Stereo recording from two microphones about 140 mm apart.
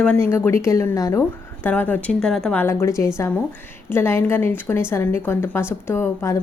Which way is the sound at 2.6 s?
20° left (ahead or behind).